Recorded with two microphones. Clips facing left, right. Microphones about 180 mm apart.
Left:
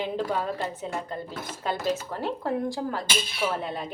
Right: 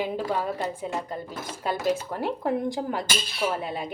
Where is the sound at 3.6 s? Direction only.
5° right (ahead or behind).